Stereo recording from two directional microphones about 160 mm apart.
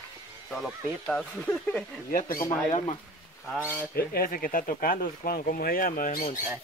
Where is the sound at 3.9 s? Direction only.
70° left (ahead or behind).